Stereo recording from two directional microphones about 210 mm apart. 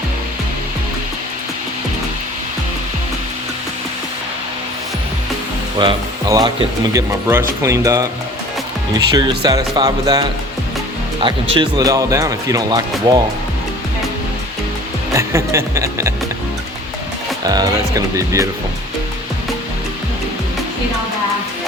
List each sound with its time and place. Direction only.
5.8 s speech: 20° right (ahead or behind)
11.5 s speech: 20° right (ahead or behind)
15.1 s speech: 15° right (ahead or behind)
17.4 s speech: 20° right (ahead or behind)